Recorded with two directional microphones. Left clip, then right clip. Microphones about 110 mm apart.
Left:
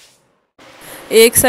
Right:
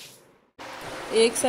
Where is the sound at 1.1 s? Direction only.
80° left.